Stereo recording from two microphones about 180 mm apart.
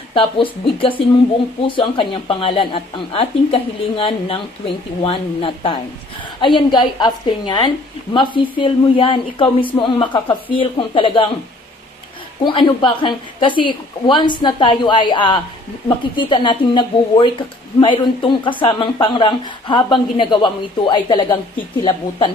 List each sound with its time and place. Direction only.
0.1 s a woman's voice: 30° left (ahead or behind)
12.5 s a woman's voice: 25° left (ahead or behind)